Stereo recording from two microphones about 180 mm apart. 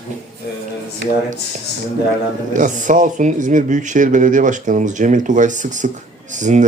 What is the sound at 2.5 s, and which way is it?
Speech, 45° right (ahead or behind).